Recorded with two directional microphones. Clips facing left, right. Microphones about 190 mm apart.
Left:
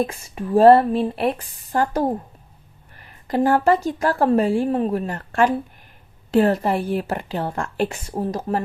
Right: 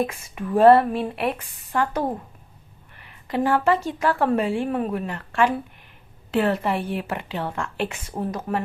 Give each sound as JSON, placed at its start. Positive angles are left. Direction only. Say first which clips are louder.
{"t": 0.0, "sound": "a woman's voice", "louder": "left 2 dB", "side_deg": 30}